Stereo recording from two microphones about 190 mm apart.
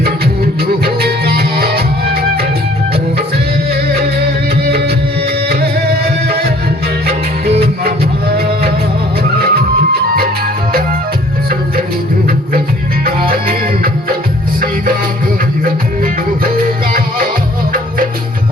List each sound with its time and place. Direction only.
0.9 s music: 55° right (ahead or behind)
9.4 s music: 50° right (ahead or behind)
13.3 s music: 50° right (ahead or behind)
16.4 s music: 50° right (ahead or behind)